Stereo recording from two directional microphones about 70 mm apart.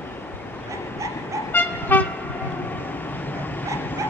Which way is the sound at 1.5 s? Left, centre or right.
Left.